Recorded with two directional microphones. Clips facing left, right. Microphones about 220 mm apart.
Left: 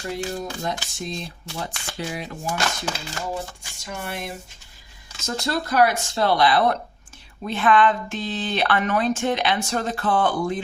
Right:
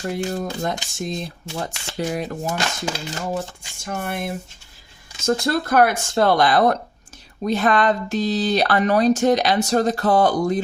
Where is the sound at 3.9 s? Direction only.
50° right (ahead or behind).